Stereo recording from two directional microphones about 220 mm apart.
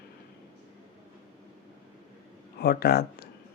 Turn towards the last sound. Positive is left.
turn(degrees=45)  # may be behind; listen again after turning